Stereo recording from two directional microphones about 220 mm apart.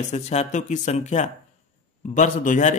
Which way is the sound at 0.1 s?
30° left (ahead or behind).